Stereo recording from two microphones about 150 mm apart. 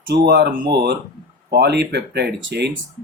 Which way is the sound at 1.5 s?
90° right.